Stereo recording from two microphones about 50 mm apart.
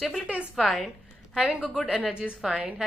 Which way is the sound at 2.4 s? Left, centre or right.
Centre.